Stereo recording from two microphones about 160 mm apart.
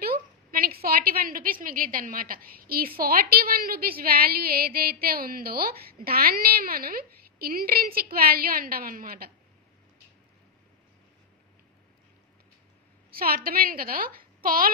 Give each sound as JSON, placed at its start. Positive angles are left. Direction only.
{"t": 0.0, "sound": "a woman's voice", "side_deg": -70}
{"t": 13.1, "sound": "a woman's voice", "side_deg": -70}